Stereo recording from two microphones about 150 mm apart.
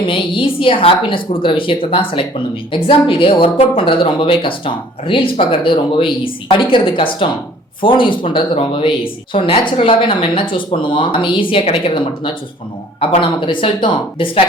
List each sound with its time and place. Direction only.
0.1 s speech: 35° left (ahead or behind)